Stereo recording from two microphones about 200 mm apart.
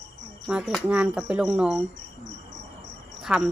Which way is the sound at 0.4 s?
Centre (ahead or behind).